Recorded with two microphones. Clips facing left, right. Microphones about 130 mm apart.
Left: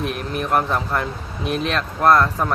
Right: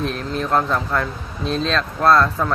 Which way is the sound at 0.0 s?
15° left (ahead or behind).